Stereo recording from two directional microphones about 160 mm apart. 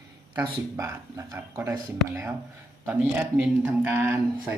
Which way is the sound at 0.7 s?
15° right (ahead or behind).